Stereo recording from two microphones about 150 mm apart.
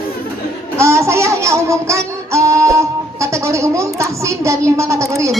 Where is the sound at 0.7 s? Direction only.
20° right (ahead or behind).